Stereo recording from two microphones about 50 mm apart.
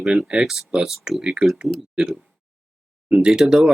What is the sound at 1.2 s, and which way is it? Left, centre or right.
Speech, centre.